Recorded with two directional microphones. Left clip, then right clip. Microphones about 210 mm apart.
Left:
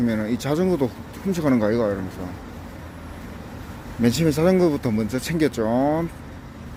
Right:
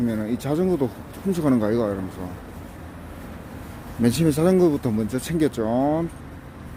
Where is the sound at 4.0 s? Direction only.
15° right (ahead or behind).